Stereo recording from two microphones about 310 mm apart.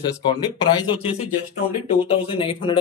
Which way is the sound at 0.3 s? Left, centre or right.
Centre.